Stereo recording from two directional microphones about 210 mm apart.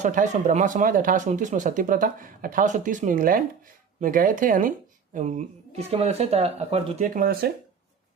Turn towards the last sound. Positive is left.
turn(degrees=-45)  # may be behind; listen again after turning